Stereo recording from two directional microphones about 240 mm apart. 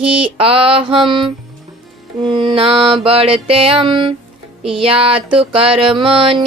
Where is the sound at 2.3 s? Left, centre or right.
Centre.